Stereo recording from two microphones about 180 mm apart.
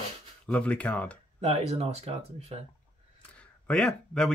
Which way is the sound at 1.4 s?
35° right (ahead or behind).